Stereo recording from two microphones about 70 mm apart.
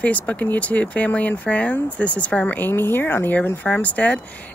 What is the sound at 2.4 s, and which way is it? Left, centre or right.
Speech, left.